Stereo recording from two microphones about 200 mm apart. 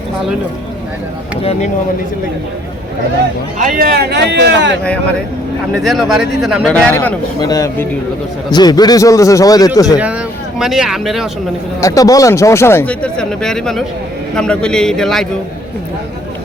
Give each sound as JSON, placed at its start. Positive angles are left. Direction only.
{"t": 3.6, "sound": "speech", "side_deg": -45}
{"t": 5.8, "sound": "speech", "side_deg": 0}
{"t": 10.6, "sound": "speech", "side_deg": 0}
{"t": 11.8, "sound": "speech", "side_deg": 15}